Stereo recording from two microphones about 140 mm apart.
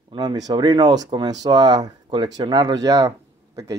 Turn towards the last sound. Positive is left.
turn(degrees=-25)  # may be behind; listen again after turning